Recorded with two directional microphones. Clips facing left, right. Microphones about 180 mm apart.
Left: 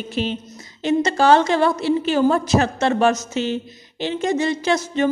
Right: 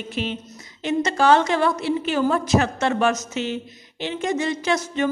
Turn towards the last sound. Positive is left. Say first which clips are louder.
# left 3 dB
turn(degrees=30)  # may be behind; listen again after turning